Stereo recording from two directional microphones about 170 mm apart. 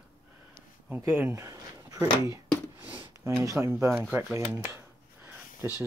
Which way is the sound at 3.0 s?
25° right (ahead or behind).